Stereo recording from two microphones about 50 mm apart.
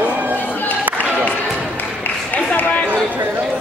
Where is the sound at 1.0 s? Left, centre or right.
Left.